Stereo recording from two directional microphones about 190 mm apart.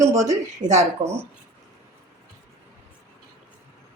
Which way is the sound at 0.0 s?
15° right (ahead or behind).